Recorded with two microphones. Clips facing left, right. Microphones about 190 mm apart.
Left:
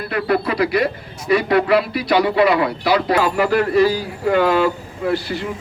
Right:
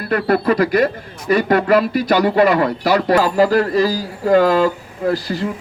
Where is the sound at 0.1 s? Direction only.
45° right (ahead or behind).